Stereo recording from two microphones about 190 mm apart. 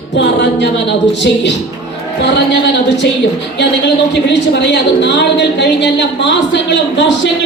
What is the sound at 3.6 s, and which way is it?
A woman's voice, 65° left (ahead or behind).